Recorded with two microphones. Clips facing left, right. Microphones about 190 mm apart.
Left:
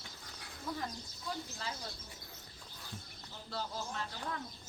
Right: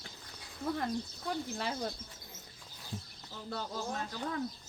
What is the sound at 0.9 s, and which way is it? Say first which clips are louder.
Speech: right 8 dB; 65° right (ahead or behind).